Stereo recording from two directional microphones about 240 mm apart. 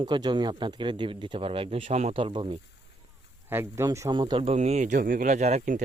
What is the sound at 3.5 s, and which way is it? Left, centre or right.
Speech, centre.